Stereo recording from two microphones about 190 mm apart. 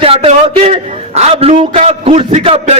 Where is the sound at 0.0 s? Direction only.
30° right (ahead or behind).